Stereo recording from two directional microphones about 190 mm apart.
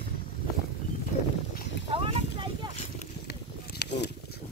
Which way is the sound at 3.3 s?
60° left (ahead or behind).